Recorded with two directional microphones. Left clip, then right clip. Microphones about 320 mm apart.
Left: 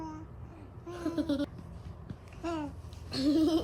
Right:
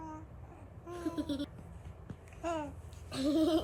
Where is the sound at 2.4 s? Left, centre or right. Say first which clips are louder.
Even; centre.